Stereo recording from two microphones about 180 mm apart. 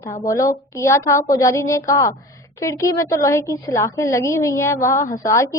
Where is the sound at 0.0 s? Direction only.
20° left (ahead or behind).